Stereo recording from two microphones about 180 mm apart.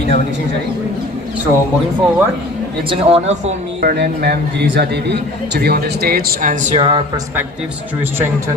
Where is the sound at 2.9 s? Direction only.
35° right (ahead or behind).